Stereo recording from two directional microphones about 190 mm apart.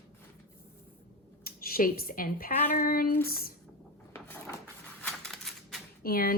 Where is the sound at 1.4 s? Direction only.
50° left (ahead or behind).